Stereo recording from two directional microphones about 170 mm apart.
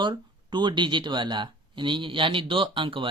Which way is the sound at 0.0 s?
25° right (ahead or behind).